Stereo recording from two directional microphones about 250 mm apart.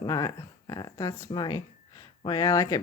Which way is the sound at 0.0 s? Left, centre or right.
Centre.